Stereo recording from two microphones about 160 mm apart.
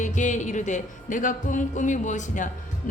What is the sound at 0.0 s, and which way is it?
Music, 50° left (ahead or behind).